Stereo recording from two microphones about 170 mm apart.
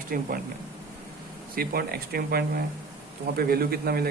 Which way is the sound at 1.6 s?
65° right (ahead or behind).